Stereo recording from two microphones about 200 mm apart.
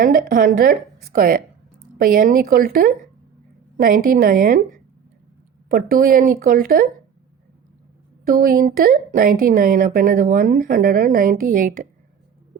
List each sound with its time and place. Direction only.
0.0 s speech: 45° right (ahead or behind)
8.3 s speech: 45° right (ahead or behind)